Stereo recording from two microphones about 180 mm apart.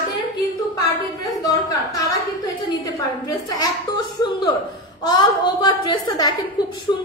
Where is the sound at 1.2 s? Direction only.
20° left (ahead or behind).